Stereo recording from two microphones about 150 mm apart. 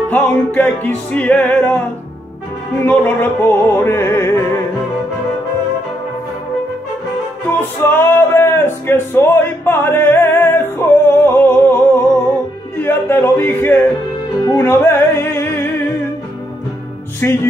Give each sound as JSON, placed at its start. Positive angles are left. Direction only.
{"t": 0.1, "sound": "music", "side_deg": 10}
{"t": 2.8, "sound": "music", "side_deg": 10}
{"t": 7.5, "sound": "music", "side_deg": 15}
{"t": 12.7, "sound": "a sound", "side_deg": 15}
{"t": 14.4, "sound": "music", "side_deg": 20}
{"t": 17.2, "sound": "music", "side_deg": 15}